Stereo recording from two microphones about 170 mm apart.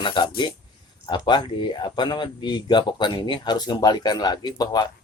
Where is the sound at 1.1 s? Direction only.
25° left (ahead or behind).